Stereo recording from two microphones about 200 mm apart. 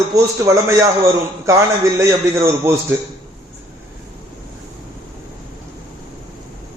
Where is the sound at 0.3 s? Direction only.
15° right (ahead or behind).